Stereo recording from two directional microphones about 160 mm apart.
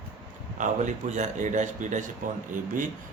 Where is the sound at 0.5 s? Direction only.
50° right (ahead or behind).